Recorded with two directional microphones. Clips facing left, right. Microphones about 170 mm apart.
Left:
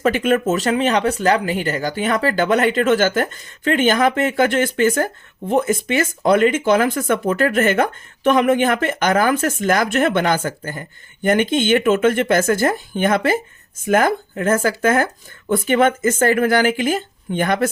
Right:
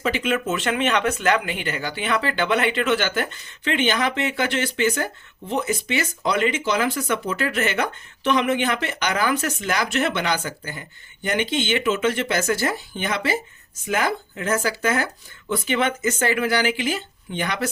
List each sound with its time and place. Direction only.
0.0 s speech: 50° left (ahead or behind)